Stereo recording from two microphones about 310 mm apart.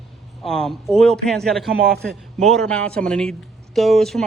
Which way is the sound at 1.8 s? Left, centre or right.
Right.